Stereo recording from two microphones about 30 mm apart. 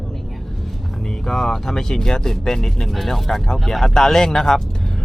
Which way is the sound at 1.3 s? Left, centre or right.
Centre.